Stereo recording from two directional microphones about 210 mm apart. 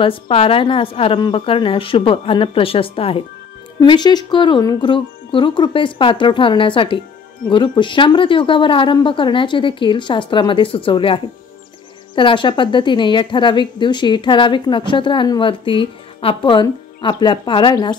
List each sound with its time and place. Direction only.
0.0 s speech: 25° left (ahead or behind)
12.2 s speech: 25° left (ahead or behind)